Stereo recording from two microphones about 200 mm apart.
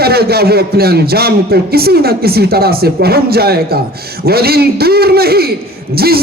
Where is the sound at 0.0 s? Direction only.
50° right (ahead or behind).